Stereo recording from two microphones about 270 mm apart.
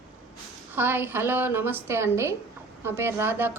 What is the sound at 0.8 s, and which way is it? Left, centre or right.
Speech, centre.